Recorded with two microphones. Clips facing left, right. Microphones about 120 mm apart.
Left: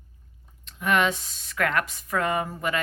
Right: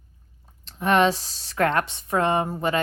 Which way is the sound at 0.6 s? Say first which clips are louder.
Right 4 dB; 35° right (ahead or behind).